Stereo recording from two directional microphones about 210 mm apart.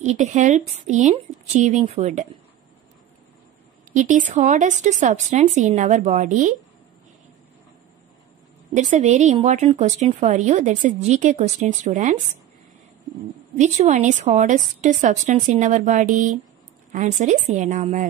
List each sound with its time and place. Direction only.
0.0 s a woman's voice: 30° right (ahead or behind)
3.9 s a woman's voice: 35° right (ahead or behind)
8.7 s a woman's voice: 35° right (ahead or behind)
13.6 s a woman's voice: 35° right (ahead or behind)